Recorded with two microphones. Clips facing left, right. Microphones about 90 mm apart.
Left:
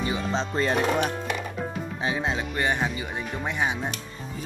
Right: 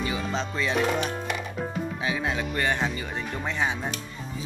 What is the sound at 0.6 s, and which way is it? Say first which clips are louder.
Speech: left 2 dB; 45° left (ahead or behind).